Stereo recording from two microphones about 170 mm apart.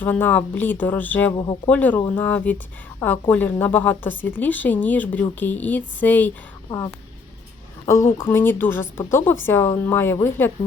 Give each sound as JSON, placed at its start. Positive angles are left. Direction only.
{"t": 0.0, "sound": "a woman's voice", "side_deg": 10}
{"t": 6.7, "sound": "a woman's voice", "side_deg": 20}